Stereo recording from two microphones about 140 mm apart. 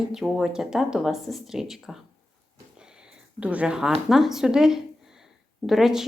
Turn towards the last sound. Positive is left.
turn(degrees=0)  # may be behind; listen again after turning